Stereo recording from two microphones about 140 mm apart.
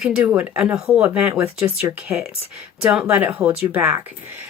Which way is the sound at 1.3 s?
20° right (ahead or behind).